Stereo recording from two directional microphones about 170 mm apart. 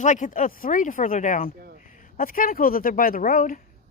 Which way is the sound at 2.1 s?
55° left (ahead or behind).